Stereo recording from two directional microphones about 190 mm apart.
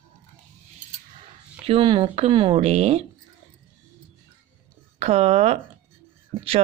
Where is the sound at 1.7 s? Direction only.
25° right (ahead or behind).